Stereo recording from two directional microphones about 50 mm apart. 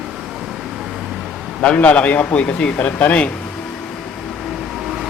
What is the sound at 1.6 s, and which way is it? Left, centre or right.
Speech, left.